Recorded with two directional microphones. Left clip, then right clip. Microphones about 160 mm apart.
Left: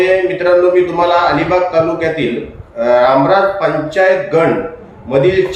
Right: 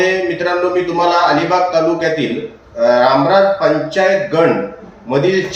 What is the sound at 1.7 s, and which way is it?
Speech, 15° right (ahead or behind).